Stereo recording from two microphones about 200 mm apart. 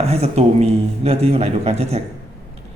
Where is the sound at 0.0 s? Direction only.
30° right (ahead or behind).